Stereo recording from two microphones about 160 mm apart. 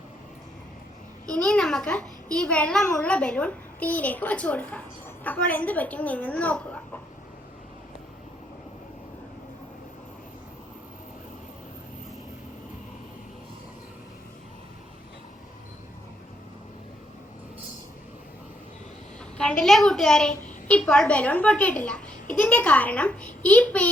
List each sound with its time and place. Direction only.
1.3 s a child's voice: 5° left (ahead or behind)
19.4 s a woman's voice: 5° left (ahead or behind)